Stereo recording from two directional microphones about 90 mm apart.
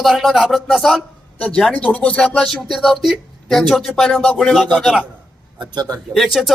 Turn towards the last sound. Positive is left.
turn(degrees=0)  # may be behind; listen again after turning